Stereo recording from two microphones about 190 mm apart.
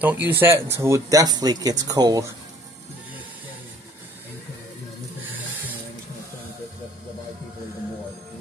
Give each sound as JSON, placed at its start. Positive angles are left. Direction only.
{"t": 0.0, "sound": "speech", "side_deg": -10}